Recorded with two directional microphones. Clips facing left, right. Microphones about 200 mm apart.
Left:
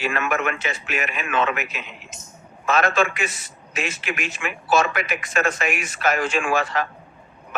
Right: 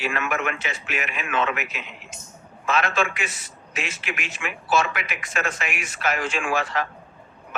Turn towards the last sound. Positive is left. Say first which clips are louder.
# left 3 dB
turn(degrees=45)  # may be behind; listen again after turning